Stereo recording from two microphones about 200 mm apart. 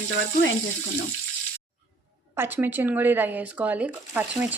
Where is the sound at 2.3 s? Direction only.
10° right (ahead or behind).